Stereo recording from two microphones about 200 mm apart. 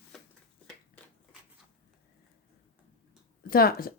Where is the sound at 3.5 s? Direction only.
50° left (ahead or behind).